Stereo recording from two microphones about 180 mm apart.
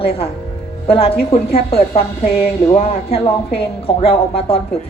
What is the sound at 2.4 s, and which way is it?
A woman's voice, 35° left (ahead or behind).